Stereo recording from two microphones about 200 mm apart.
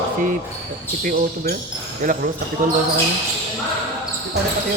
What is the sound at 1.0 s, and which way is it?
Speech, 45° right (ahead or behind).